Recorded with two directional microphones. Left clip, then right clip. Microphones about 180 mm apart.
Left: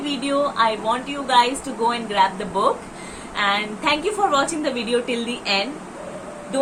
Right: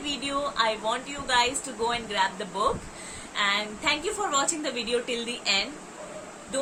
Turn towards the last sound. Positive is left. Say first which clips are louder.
# left 4 dB
turn(degrees=-10)  # may be behind; listen again after turning